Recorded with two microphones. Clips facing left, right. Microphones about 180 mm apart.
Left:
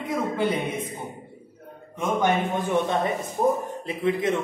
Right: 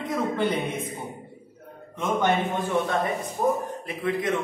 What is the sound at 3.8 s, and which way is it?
Speech, 25° left (ahead or behind).